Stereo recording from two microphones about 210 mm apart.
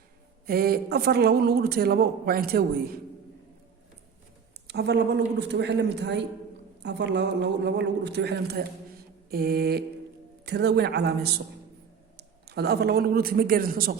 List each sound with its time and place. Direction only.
0.4 s a man's voice: 45° right (ahead or behind)
4.7 s a man's voice: 50° right (ahead or behind)